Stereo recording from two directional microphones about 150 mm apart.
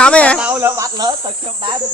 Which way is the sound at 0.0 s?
5° left (ahead or behind).